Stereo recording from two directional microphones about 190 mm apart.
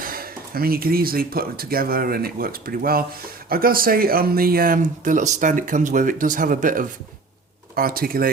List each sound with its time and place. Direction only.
0.0 s speech: 50° right (ahead or behind)